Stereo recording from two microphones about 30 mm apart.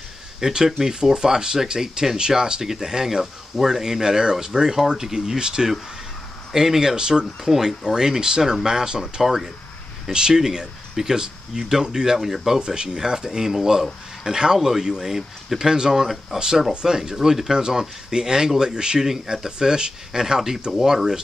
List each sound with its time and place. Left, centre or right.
0.4 s speech: right
2.6 s speech: centre
6.5 s speech: centre
7.0 s speech: right
7.4 s speech: centre
7.8 s speech: right
9.2 s speech: centre
10.1 s speech: right
12.2 s speech: centre
12.5 s speech: right
15.0 s speech: centre
15.6 s speech: right
17.6 s speech: right